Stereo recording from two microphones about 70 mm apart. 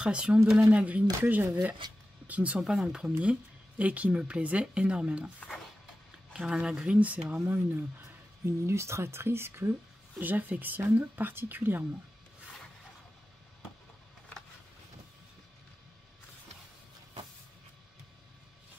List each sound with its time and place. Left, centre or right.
0.0 s speech: centre
1.2 s speech: right
1.8 s speech: right
2.2 s speech: right
2.6 s speech: centre
6.3 s speech: centre
7.0 s speech: right
7.4 s speech: right
10.1 s speech: right